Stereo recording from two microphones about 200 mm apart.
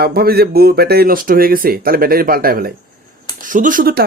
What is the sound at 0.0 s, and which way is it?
Speech, 50° right (ahead or behind).